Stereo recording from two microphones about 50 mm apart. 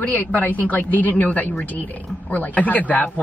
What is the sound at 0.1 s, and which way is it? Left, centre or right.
Speech, left.